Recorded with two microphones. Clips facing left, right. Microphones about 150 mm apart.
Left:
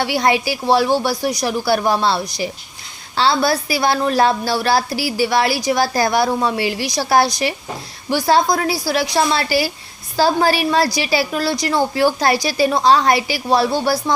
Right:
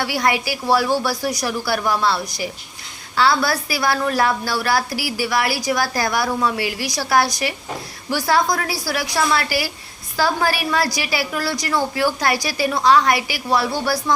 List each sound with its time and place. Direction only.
0.0 s a woman's voice: 25° left (ahead or behind)